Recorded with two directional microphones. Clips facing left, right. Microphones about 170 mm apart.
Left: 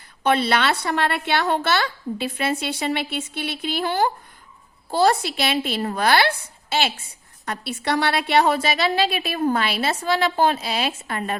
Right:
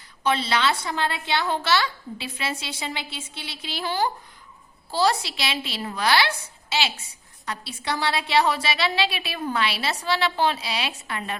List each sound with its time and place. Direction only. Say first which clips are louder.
0.2 s a woman's voice: left 4 dB; 55° left (ahead or behind)